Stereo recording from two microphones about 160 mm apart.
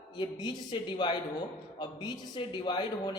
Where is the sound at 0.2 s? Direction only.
30° left (ahead or behind).